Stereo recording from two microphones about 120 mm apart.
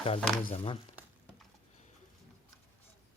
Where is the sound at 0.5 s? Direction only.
55° left (ahead or behind).